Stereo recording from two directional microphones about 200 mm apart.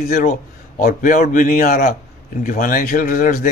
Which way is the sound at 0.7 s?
45° left (ahead or behind).